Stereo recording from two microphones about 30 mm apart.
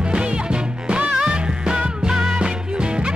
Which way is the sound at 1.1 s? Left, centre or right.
Right.